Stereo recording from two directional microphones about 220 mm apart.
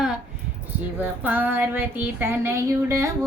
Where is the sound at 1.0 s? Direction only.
10° right (ahead or behind).